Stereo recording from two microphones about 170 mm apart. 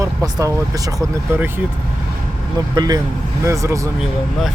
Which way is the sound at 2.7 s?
25° right (ahead or behind).